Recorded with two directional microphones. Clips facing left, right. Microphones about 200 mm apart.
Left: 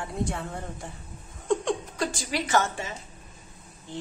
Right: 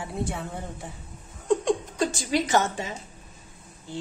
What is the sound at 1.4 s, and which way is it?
Laughter, 10° right (ahead or behind).